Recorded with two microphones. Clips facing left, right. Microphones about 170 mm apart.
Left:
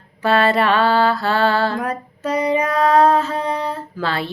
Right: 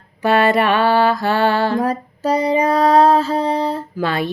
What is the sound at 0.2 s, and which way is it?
Speech, 15° right (ahead or behind).